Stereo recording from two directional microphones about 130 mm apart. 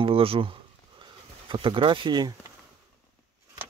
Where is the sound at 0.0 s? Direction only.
45° right (ahead or behind).